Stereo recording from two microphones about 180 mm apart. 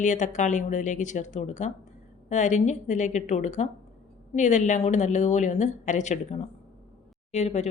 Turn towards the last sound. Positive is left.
turn(degrees=40)  # may be behind; listen again after turning